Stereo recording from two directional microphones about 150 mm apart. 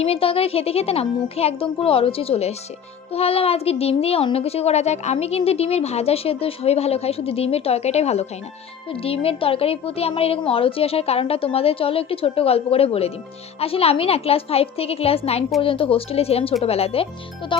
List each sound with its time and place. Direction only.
0.0 s a woman's voice: 40° left (ahead or behind)